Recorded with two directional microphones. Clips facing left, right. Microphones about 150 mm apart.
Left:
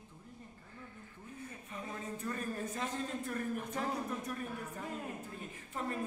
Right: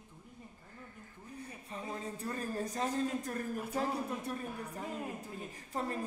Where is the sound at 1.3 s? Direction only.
35° right (ahead or behind).